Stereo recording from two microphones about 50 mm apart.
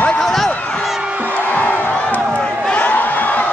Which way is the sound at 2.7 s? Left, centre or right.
Left.